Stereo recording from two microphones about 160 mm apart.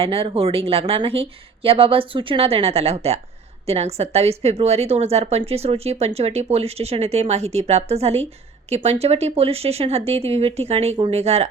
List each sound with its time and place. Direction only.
0.0 s a woman's voice: 35° right (ahead or behind)